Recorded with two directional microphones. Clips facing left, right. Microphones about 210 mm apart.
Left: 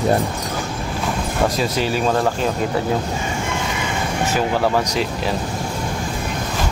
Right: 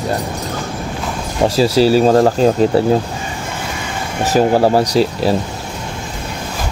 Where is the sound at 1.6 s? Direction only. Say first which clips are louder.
Right 9 dB; 35° right (ahead or behind).